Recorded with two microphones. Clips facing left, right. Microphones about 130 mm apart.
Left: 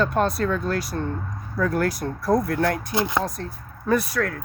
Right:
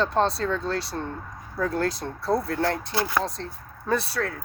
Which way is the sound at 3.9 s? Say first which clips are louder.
Left 4 dB; 30° right (ahead or behind).